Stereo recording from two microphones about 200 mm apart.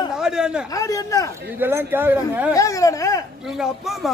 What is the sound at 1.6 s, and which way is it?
Speech, 10° right (ahead or behind).